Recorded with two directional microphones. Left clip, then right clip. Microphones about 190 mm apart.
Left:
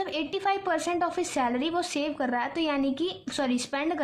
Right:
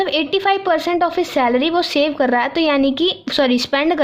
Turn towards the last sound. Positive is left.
turn(degrees=-35)  # may be behind; listen again after turning